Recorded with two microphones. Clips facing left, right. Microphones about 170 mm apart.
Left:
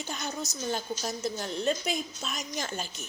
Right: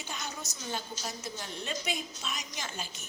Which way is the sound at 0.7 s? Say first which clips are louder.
Left 4 dB; 45° left (ahead or behind).